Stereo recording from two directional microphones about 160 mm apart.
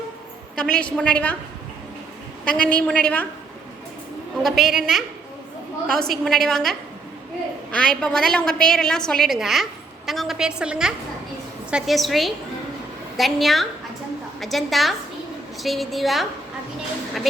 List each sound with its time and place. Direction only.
0.5 s a woman's voice: 5° left (ahead or behind)
2.4 s a woman's voice: 10° left (ahead or behind)
4.4 s a woman's voice: centre (ahead or behind)